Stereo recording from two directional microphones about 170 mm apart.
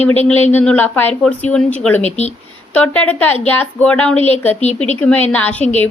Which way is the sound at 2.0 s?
40° left (ahead or behind).